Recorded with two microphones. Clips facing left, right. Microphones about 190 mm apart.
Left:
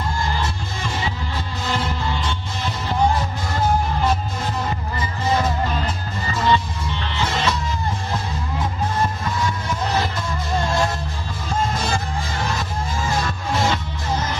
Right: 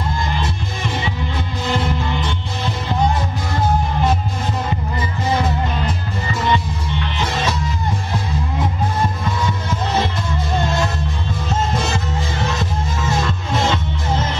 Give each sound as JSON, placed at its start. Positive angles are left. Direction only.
{"t": 1.7, "sound": "music", "side_deg": -20}
{"t": 13.2, "sound": "music", "side_deg": -25}